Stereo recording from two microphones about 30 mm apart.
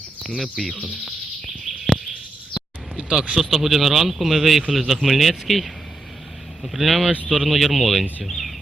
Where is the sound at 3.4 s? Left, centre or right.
Centre.